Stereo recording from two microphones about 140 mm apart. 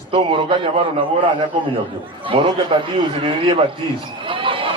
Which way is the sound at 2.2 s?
40° right (ahead or behind).